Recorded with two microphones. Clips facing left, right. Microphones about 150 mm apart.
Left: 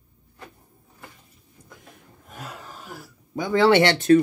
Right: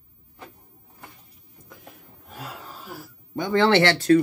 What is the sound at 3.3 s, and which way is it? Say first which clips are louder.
Speech: left 2 dB; 10° left (ahead or behind).